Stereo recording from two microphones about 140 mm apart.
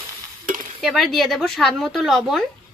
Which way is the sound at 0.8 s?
Centre (ahead or behind).